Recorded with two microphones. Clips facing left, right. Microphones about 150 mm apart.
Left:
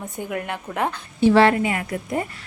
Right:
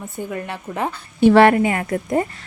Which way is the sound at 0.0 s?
10° left (ahead or behind).